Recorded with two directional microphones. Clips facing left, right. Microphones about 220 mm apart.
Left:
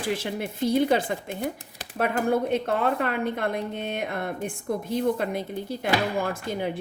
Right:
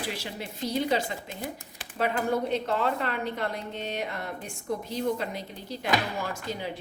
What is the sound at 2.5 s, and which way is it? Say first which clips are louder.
A woman's voice: left 3 dB; 55° left (ahead or behind).